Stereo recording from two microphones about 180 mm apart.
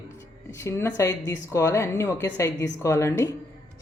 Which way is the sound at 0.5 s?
15° left (ahead or behind).